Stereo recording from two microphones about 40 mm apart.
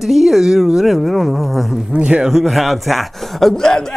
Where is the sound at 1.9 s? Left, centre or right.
Right.